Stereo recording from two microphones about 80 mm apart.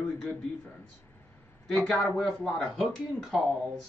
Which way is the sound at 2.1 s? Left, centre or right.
Centre.